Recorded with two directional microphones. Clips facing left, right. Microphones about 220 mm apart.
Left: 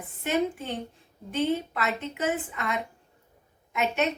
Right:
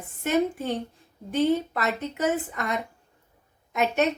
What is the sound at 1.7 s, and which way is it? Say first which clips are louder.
A woman's voice: right 2 dB; 40° right (ahead or behind).